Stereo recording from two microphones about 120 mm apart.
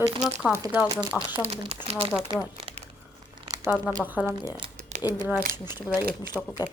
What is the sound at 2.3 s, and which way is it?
Speech, 40° right (ahead or behind).